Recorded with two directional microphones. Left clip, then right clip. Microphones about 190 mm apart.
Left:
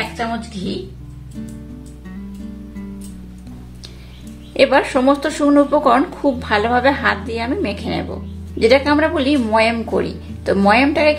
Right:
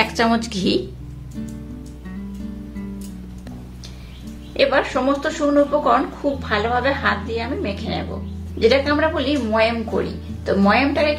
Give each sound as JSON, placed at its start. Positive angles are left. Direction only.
{"t": 0.2, "sound": "a woman's voice", "side_deg": -55}
{"t": 4.6, "sound": "a woman's voice", "side_deg": 35}